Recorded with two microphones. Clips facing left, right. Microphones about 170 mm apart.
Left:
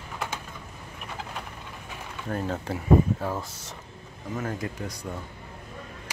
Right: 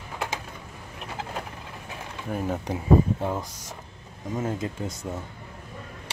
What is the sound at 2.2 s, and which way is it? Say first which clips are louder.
Speech: right 1 dB; 10° right (ahead or behind).